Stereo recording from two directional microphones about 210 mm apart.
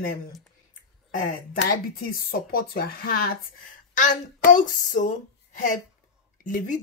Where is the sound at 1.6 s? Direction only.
45° left (ahead or behind).